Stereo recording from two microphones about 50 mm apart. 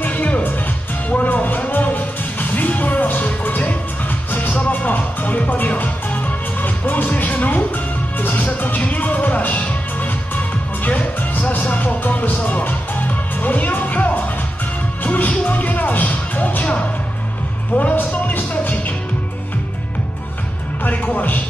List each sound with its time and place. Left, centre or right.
0.0 s music: left
1.1 s music: left
17.7 s music: left
20.8 s music: left